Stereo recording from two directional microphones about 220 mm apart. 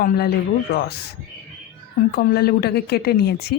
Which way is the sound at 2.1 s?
45° left (ahead or behind).